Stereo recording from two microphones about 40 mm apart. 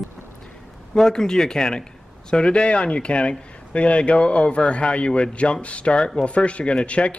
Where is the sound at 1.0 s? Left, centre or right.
Centre.